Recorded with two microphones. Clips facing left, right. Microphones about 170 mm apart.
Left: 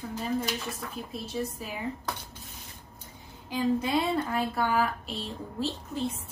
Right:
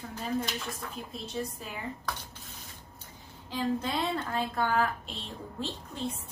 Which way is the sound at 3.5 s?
10° left (ahead or behind).